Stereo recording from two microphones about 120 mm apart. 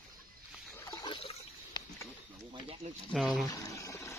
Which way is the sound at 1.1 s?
50° left (ahead or behind).